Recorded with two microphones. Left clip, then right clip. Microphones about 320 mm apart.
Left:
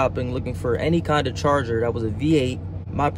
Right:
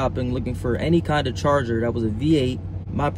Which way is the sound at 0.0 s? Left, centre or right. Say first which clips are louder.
Left 2 dB; centre.